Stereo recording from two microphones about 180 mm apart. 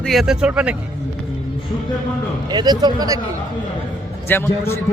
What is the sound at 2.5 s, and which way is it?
Speech, 25° right (ahead or behind).